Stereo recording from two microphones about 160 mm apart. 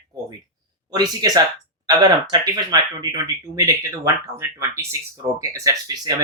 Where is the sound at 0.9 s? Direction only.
25° right (ahead or behind).